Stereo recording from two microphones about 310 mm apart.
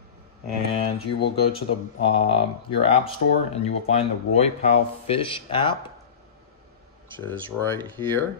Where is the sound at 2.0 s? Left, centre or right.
Centre.